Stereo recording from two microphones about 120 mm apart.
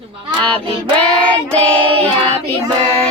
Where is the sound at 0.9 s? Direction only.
10° left (ahead or behind).